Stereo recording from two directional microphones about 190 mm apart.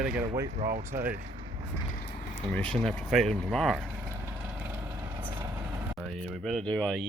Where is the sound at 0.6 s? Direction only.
40° right (ahead or behind).